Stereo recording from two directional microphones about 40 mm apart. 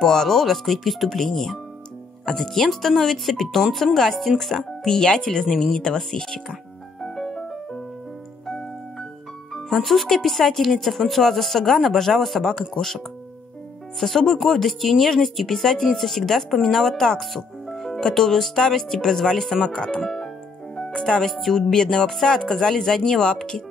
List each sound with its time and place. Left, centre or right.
0.0 s speech: centre
4.6 s speech: centre
7.0 s music: centre
9.8 s speech: centre
20.7 s music: centre
21.2 s speech: centre